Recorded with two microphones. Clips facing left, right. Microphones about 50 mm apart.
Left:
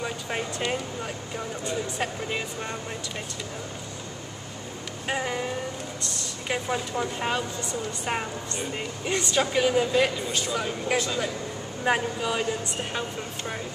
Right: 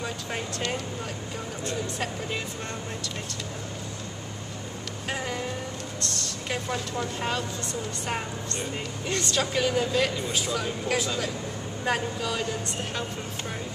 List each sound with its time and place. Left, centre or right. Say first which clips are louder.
0.0 s a sound: left 2 dB; centre
1.6 s speech: left 1 dB; centre
5.0 s vehicle: left 3 dB; centre
5.9 s speech: right 1 dB; centre
10.1 s speech: even; centre
10.9 s speech: left 2 dB; centre